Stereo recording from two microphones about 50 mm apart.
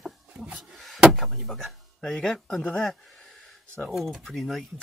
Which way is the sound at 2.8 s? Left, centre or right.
Centre.